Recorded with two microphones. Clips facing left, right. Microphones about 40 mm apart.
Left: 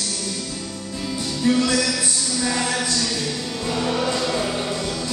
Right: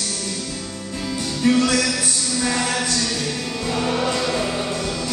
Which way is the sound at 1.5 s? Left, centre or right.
Right.